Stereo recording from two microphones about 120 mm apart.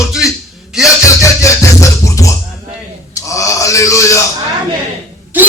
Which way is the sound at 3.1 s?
25° left (ahead or behind).